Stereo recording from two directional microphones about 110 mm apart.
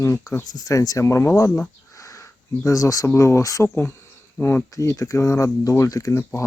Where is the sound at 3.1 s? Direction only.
25° left (ahead or behind).